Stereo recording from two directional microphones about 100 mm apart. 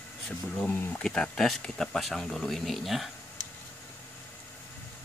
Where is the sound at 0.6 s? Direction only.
20° left (ahead or behind).